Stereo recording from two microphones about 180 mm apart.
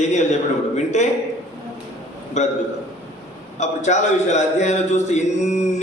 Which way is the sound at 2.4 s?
40° left (ahead or behind).